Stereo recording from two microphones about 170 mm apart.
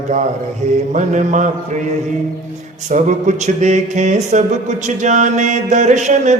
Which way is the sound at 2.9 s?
45° right (ahead or behind).